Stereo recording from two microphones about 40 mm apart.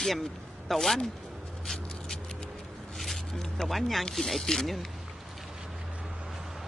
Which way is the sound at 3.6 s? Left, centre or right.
Centre.